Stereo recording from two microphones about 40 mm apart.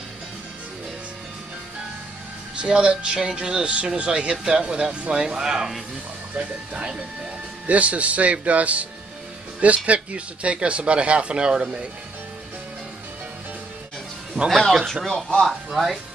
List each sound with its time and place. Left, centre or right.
2.5 s speech: right
6.3 s speech: right
9.8 s speech: right
14.5 s speech: centre
15.0 s speech: centre
15.4 s speech: centre